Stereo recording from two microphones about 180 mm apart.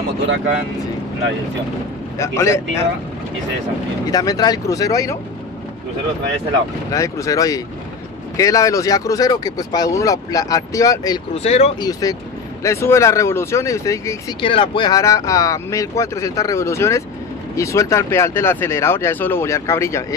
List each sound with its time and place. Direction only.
2.1 s speech: 15° left (ahead or behind)
4.1 s speech: 20° left (ahead or behind)
6.9 s speech: 20° left (ahead or behind)
11.3 s speech: 35° left (ahead or behind)
11.8 s speech: 20° left (ahead or behind)
14.4 s speech: 30° left (ahead or behind)